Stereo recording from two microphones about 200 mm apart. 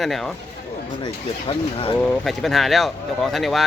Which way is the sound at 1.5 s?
25° left (ahead or behind).